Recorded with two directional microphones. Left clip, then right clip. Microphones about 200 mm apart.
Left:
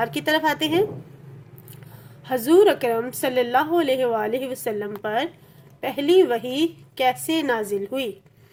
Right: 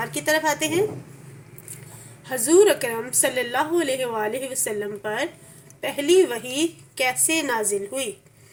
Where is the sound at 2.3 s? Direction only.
40° left (ahead or behind).